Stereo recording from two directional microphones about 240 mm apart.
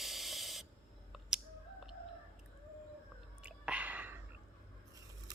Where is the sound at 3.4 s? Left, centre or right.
Centre.